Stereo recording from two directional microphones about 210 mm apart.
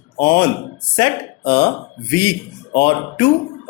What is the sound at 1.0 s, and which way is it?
Speech, 20° left (ahead or behind).